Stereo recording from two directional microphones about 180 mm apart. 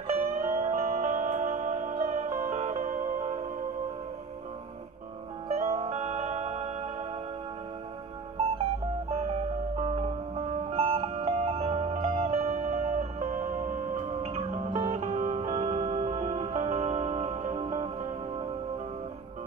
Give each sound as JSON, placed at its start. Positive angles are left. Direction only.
{"t": 0.1, "sound": "music", "side_deg": -35}
{"t": 5.5, "sound": "music", "side_deg": -35}
{"t": 9.1, "sound": "music", "side_deg": -35}